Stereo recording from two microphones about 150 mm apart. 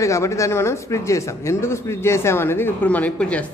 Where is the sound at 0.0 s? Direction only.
20° left (ahead or behind).